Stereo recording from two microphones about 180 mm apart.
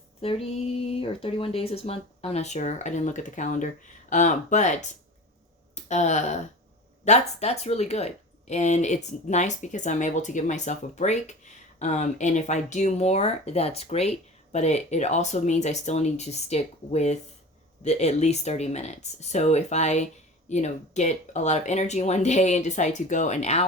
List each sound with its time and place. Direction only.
0.2 s speech: 35° left (ahead or behind)